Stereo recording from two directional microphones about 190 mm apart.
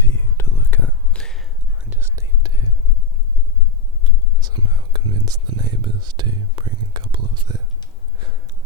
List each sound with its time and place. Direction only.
0.0 s whispering: 15° left (ahead or behind); by 2.6 s 20° right (ahead or behind)
4.0 s whispering: 20° right (ahead or behind)
8.2 s a sound: 25° right (ahead or behind)